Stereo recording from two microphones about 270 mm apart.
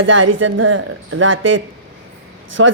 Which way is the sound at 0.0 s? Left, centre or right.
Right.